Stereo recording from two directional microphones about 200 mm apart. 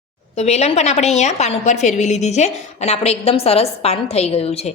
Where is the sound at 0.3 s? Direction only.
35° left (ahead or behind).